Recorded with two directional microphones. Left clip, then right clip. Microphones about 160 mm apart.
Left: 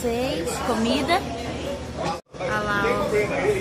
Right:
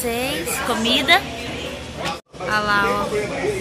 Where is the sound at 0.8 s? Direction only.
10° left (ahead or behind).